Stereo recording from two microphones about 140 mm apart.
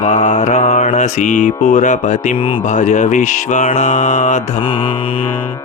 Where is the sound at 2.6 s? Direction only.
60° left (ahead or behind).